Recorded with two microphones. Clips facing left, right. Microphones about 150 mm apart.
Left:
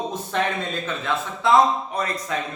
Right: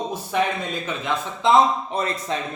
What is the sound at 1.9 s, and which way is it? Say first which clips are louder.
Speech: right 1 dB; 25° right (ahead or behind).